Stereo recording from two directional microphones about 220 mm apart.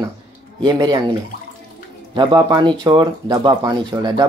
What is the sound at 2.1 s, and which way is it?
Speech, 20° right (ahead or behind).